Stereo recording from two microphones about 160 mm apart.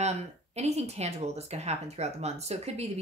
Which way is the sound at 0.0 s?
45° right (ahead or behind).